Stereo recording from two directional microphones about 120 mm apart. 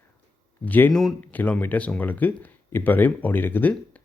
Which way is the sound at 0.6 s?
15° left (ahead or behind).